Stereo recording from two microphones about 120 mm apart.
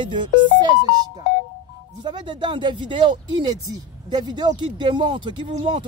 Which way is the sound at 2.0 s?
40° right (ahead or behind).